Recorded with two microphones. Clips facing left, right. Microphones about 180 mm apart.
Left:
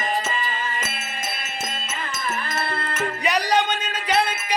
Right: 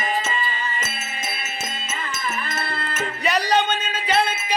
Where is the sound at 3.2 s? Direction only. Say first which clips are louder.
Right 1 dB; 15° left (ahead or behind).